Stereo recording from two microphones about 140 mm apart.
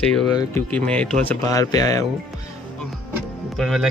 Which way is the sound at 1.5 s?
25° left (ahead or behind).